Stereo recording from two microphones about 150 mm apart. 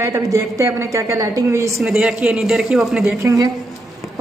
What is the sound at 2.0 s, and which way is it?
A woman's voice, 5° right (ahead or behind).